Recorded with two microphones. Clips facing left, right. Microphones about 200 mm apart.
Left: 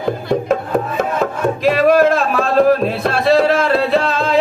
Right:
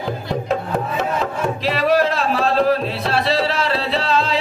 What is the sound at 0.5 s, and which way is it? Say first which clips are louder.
Music: left 4 dB; 50° left (ahead or behind).